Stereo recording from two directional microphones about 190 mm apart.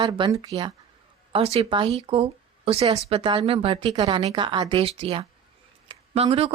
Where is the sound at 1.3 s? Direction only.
35° right (ahead or behind).